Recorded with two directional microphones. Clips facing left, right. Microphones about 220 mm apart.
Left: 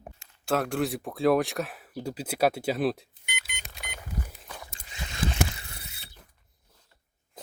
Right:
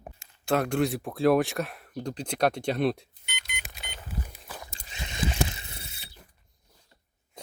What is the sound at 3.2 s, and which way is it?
Vehicle, 5° left (ahead or behind).